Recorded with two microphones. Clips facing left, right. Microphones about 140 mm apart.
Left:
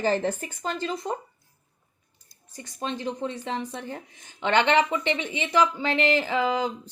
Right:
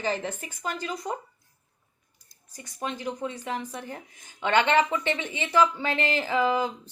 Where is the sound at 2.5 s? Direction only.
25° left (ahead or behind).